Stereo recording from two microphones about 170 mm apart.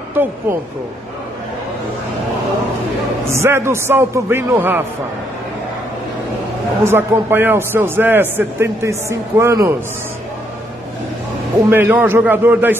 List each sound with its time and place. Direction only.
0.1 s a man's voice: 10° right (ahead or behind)
3.3 s a man's voice: 15° right (ahead or behind)
6.8 s a man's voice: 15° right (ahead or behind)
11.7 s a man's voice: 10° right (ahead or behind)